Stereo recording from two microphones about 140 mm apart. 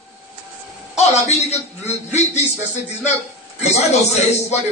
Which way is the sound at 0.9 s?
50° left (ahead or behind).